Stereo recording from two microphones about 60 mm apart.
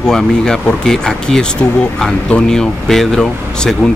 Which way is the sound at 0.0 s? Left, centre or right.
Centre.